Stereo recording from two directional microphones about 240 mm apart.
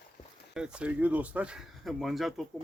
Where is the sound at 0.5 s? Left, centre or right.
Centre.